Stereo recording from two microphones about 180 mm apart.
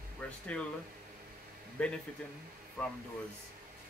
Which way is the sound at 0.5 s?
5° left (ahead or behind).